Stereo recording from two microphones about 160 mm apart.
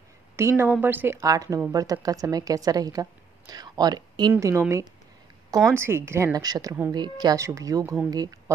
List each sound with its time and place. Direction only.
0.4 s a woman's voice: 15° right (ahead or behind)